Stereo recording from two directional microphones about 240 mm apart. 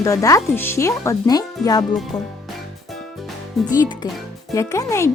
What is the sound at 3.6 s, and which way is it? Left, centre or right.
Speech, centre.